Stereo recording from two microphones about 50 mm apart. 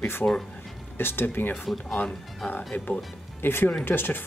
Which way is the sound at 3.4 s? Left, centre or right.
Left.